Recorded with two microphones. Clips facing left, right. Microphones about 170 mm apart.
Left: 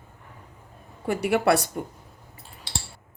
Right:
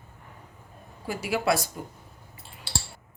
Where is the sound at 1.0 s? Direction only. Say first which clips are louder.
Left 5 dB; 60° left (ahead or behind).